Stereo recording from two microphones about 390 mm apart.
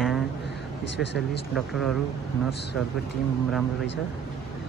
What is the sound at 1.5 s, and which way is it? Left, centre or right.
Speech, centre.